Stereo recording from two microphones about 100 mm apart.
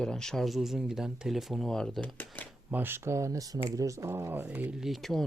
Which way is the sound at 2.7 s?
20° right (ahead or behind).